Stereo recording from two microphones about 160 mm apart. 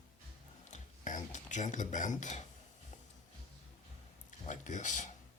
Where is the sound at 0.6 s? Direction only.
50° left (ahead or behind).